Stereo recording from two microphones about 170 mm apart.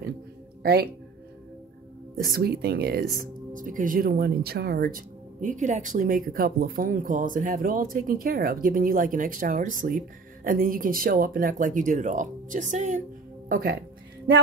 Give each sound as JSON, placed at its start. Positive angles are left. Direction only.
{"t": 0.6, "sound": "speech", "side_deg": -65}
{"t": 2.1, "sound": "speech", "side_deg": -60}
{"t": 13.5, "sound": "speech", "side_deg": -60}